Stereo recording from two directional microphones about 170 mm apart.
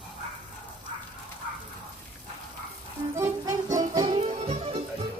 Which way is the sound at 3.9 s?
35° right (ahead or behind).